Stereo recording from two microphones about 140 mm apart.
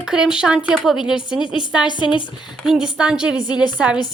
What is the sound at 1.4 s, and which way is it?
A woman's voice, 35° left (ahead or behind).